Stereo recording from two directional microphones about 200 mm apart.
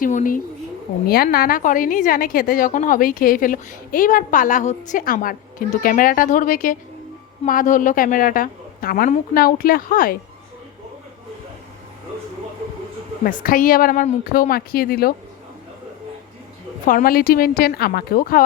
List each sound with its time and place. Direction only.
0.0 s a woman's voice: 40° left (ahead or behind)
13.4 s a woman's voice: 45° left (ahead or behind)
16.8 s a woman's voice: 45° left (ahead or behind)